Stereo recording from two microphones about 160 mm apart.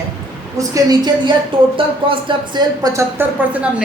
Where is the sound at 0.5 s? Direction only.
20° right (ahead or behind).